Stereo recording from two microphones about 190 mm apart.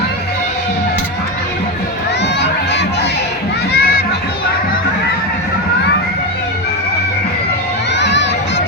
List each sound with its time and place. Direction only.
2.4 s crowd: 65° left (ahead or behind)
3.7 s a sound: 55° left (ahead or behind)
7.9 s crowd: 65° left (ahead or behind)